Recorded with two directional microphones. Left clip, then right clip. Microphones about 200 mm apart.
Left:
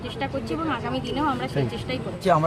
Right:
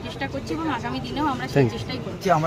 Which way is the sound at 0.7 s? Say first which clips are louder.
Left 1 dB; centre (ahead or behind).